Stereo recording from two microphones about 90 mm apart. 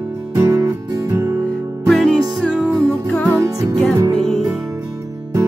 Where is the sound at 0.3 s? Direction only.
35° right (ahead or behind).